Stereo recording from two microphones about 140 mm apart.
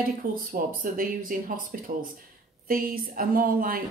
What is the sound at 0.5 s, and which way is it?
A woman's voice, 90° right.